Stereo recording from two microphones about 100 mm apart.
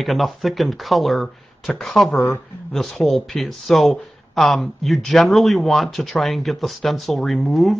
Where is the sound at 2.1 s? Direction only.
25° left (ahead or behind).